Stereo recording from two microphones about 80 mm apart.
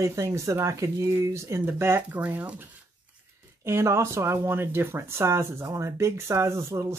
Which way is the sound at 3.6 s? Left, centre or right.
Right.